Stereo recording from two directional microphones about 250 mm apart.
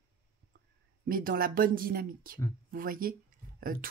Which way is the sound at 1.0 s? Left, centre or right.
Right.